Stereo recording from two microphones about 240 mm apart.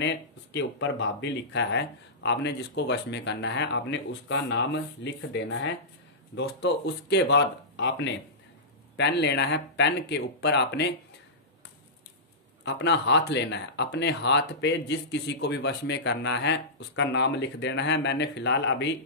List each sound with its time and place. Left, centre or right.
0.0 s speech: left
12.6 s speech: left